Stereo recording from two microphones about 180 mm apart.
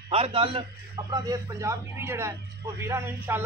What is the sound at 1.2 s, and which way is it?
Speech, 15° right (ahead or behind).